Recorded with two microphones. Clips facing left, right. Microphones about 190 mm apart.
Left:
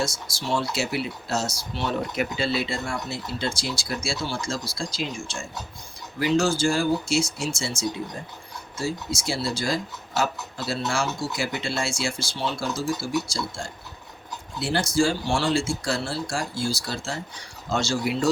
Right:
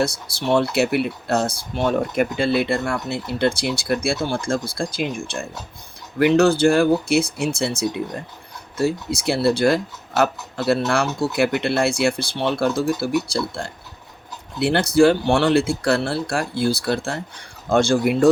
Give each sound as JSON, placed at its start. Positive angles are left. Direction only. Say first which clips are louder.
{"t": 0.0, "sound": "speech", "louder": "right 6 dB", "side_deg": -60}